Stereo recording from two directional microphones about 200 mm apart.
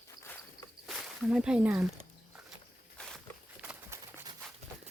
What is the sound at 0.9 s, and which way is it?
Speech, 5° right (ahead or behind).